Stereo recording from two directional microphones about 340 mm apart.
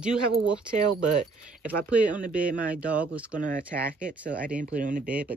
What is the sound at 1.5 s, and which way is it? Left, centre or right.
Speech, centre.